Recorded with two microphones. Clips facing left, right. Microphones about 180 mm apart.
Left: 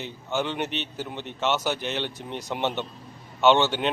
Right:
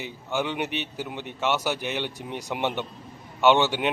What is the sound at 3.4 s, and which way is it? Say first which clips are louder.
Speech: even; 15° right (ahead or behind).